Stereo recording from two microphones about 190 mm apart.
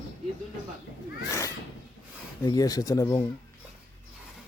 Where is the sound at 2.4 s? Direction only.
20° left (ahead or behind).